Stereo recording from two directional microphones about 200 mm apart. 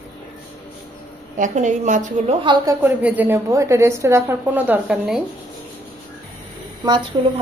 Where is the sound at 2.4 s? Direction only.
20° right (ahead or behind).